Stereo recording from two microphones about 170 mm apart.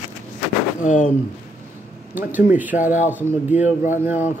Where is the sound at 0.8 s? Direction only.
50° left (ahead or behind).